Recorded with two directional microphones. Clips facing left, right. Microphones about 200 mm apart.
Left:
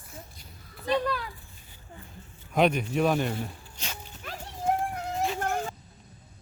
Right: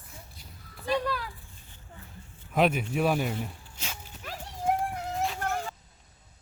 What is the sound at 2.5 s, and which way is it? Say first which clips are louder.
Speech: left 1 dB; 5° right (ahead or behind).